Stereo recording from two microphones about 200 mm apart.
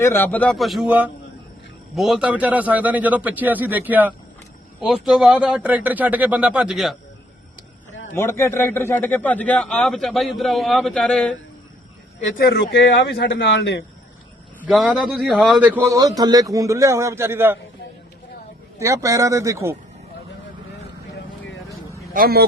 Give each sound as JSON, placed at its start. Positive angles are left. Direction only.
{"t": 0.0, "sound": "a man's voice", "side_deg": 10}
{"t": 8.1, "sound": "a man's voice", "side_deg": 15}
{"t": 12.4, "sound": "speech", "side_deg": 55}
{"t": 14.6, "sound": "a man's voice", "side_deg": -5}
{"t": 18.8, "sound": "a man's voice", "side_deg": -15}
{"t": 22.1, "sound": "speech", "side_deg": -50}